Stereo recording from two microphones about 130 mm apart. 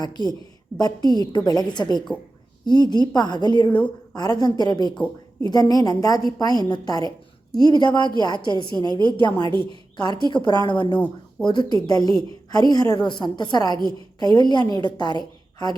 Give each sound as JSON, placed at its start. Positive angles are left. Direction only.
{"t": 0.0, "sound": "a woman's voice", "side_deg": 35}
{"t": 3.7, "sound": "a woman's voice", "side_deg": 10}
{"t": 4.1, "sound": "a woman's voice", "side_deg": 30}
{"t": 10.9, "sound": "speech", "side_deg": 10}
{"t": 11.4, "sound": "a woman's voice", "side_deg": 35}